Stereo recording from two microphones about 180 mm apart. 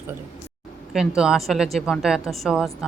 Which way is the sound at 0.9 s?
5° right (ahead or behind).